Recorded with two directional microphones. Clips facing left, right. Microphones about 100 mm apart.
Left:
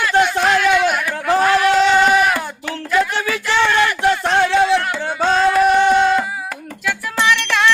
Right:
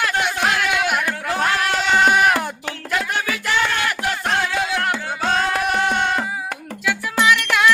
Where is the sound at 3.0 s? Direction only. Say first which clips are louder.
Left 7 dB; 35° left (ahead or behind).